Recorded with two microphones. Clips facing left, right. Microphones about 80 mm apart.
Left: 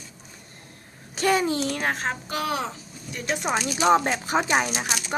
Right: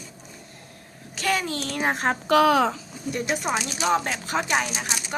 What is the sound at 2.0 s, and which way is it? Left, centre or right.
Speech, right.